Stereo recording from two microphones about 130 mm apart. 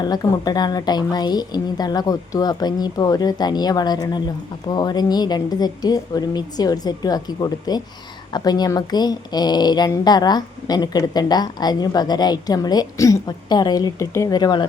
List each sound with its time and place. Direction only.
0.0 s speech: 30° left (ahead or behind)